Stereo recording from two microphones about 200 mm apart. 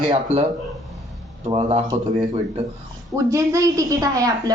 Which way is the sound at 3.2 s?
15° right (ahead or behind).